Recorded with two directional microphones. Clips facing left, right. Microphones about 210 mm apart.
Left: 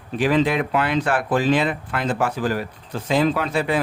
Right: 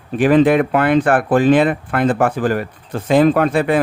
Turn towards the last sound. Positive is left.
turn(degrees=-55)  # may be behind; listen again after turning